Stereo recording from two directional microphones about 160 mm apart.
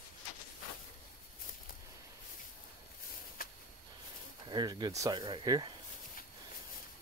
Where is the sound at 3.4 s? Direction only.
65° left (ahead or behind).